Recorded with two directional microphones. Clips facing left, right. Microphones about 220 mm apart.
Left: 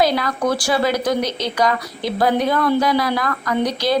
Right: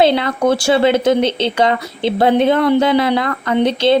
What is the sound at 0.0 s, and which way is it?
Speech, 25° right (ahead or behind).